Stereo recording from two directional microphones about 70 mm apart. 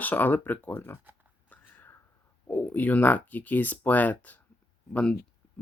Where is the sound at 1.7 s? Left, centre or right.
Left.